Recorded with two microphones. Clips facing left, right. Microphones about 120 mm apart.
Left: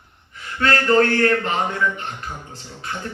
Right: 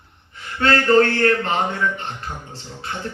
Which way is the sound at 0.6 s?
35° right (ahead or behind).